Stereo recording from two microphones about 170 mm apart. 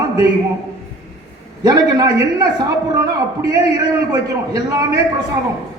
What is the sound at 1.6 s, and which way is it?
A man's voice, 20° right (ahead or behind).